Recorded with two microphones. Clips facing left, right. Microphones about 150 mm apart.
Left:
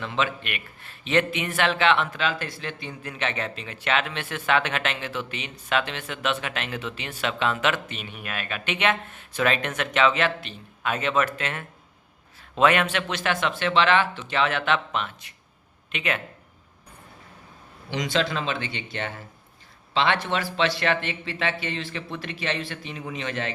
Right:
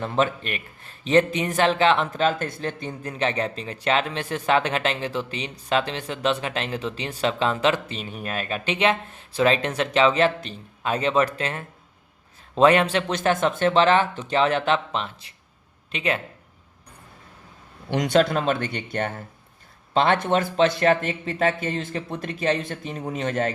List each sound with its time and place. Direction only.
0.0 s speech: 40° right (ahead or behind)
17.9 s speech: 50° right (ahead or behind)